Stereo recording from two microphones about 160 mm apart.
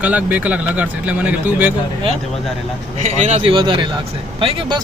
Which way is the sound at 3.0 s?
45° right (ahead or behind).